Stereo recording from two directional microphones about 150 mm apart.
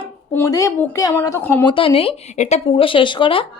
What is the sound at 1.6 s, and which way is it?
Speech, 35° left (ahead or behind).